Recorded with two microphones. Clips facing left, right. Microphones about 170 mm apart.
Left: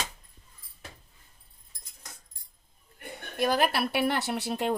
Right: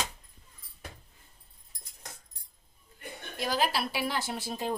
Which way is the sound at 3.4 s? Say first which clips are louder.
Left 4 dB; 60° left (ahead or behind).